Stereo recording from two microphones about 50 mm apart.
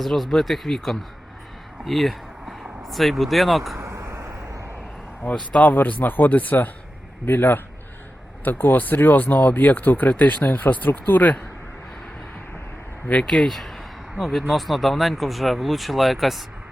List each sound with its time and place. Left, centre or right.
0.0 s speech: centre
3.8 s vehicle: right
5.3 s a man's voice: left
13.1 s speech: centre